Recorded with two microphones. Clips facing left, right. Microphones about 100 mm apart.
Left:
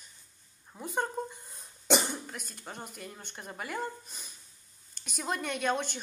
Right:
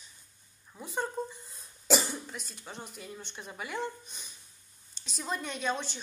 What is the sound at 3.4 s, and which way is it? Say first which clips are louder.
Speech: left 3 dB; 45° left (ahead or behind).